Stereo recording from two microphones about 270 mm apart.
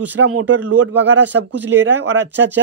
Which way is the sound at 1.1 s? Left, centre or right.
Right.